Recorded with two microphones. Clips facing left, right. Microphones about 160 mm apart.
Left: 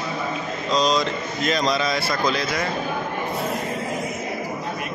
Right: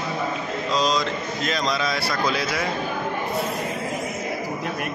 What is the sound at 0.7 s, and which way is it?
Mantra, centre (ahead or behind).